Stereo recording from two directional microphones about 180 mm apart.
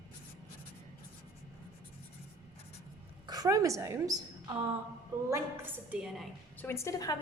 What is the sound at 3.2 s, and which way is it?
A woman's voice, 20° right (ahead or behind).